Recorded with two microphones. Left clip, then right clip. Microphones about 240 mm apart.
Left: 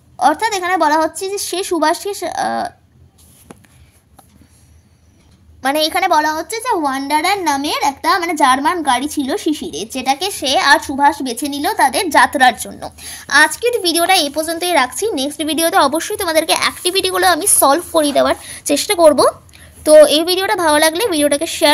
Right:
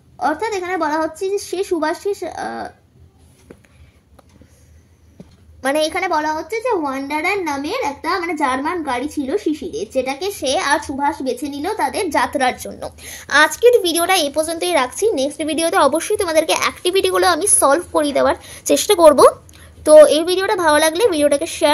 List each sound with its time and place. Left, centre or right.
0.2 s a woman's voice: left
5.6 s a woman's voice: left